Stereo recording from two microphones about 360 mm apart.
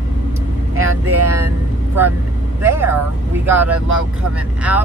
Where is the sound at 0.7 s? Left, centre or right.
Right.